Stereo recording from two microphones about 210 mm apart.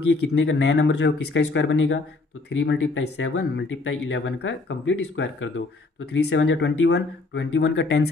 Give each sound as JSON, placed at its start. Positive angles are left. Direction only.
{"t": 0.3, "sound": "speech", "side_deg": 55}